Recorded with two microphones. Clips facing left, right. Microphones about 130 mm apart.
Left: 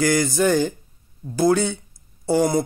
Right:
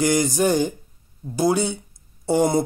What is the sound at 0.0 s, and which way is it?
Speech, 20° right (ahead or behind).